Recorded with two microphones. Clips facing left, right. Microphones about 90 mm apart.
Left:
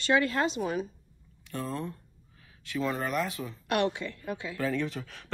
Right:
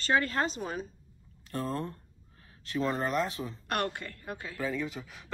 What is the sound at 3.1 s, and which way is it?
Speech, 25° right (ahead or behind).